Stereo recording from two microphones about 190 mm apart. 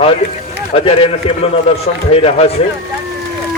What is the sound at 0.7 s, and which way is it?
Speech, 30° left (ahead or behind).